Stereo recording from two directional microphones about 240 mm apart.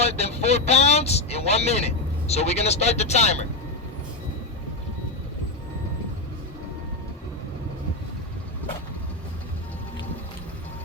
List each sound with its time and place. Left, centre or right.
0.0 s speech: left